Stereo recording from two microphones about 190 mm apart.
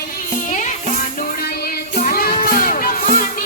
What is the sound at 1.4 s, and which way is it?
Music, 50° left (ahead or behind).